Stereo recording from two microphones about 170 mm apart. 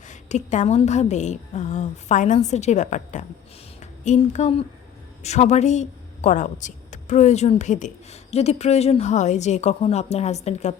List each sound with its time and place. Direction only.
0.1 s a woman's voice: 45° left (ahead or behind)